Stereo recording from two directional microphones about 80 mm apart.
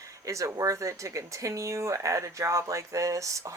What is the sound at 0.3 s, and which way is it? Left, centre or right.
Speech, right.